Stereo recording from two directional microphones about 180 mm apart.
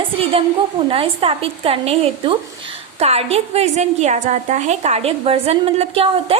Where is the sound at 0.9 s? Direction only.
30° right (ahead or behind).